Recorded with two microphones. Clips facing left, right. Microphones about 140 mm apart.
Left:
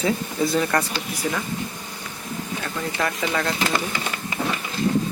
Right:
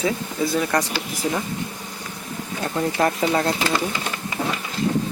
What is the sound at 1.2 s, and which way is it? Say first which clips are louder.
Speech: right 2 dB; 25° right (ahead or behind).